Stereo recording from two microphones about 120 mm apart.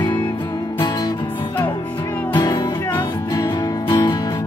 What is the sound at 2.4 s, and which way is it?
Music, 35° left (ahead or behind).